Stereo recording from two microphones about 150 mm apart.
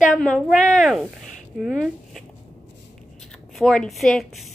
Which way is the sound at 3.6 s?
Centre (ahead or behind).